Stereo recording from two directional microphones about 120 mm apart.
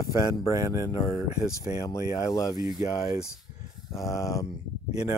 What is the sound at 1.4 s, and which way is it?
Speech, 25° left (ahead or behind).